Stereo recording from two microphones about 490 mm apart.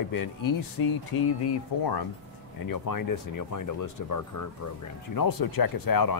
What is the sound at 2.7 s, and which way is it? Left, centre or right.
Speech, left.